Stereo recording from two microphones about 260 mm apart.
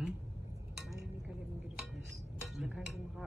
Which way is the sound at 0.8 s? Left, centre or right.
Centre.